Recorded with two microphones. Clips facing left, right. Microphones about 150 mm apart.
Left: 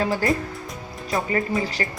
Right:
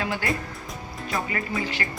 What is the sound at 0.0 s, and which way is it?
Speech, 35° left (ahead or behind).